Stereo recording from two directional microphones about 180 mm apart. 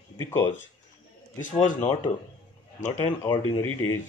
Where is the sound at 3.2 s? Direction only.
20° left (ahead or behind).